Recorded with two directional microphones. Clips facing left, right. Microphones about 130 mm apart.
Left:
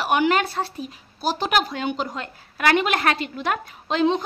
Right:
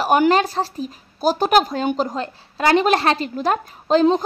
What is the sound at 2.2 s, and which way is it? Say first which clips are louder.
A woman's voice: right 5 dB; 30° right (ahead or behind).